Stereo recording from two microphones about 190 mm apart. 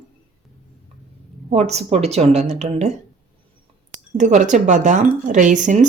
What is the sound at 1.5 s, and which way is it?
Speech, 35° right (ahead or behind).